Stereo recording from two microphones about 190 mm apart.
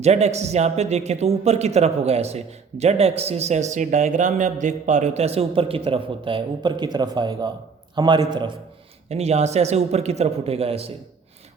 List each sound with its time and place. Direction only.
0.0 s a man's voice: 35° right (ahead or behind)
9.0 s a man's voice: 35° right (ahead or behind)